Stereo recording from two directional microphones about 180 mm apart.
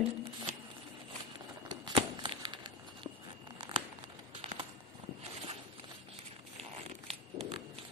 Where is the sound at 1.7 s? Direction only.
25° right (ahead or behind).